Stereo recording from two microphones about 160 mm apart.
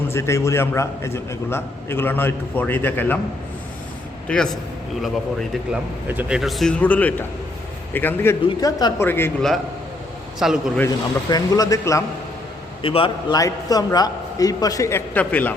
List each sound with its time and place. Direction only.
0.1 s a man's voice: 15° left (ahead or behind)
4.3 s a man's voice: 5° left (ahead or behind)
10.4 s speech: 5° right (ahead or behind)
10.8 s a man's voice: 25° left (ahead or behind)
12.8 s a man's voice: 35° left (ahead or behind)
13.4 s a man's voice: 25° left (ahead or behind)